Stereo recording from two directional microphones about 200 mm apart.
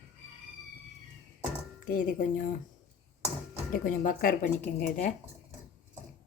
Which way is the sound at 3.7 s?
45° left (ahead or behind).